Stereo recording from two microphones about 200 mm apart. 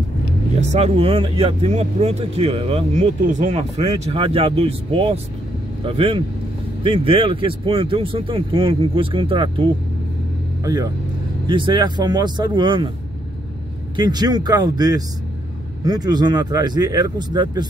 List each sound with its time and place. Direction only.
0.6 s speech: 35° right (ahead or behind)
13.9 s speech: 20° right (ahead or behind)